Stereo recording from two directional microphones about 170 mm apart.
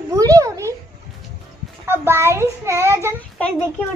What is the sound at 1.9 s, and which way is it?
A child's voice, 15° right (ahead or behind).